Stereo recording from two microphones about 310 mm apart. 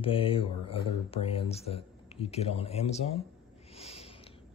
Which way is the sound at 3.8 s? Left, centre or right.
Centre.